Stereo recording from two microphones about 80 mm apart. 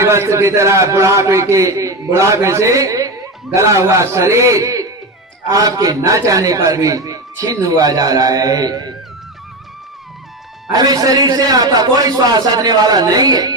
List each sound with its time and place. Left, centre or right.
0.0 s a man's voice: right
10.7 s a man's voice: right